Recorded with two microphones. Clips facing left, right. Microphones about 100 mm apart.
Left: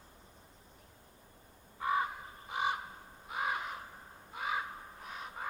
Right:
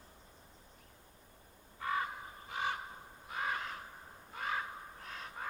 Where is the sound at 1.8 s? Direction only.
20° left (ahead or behind).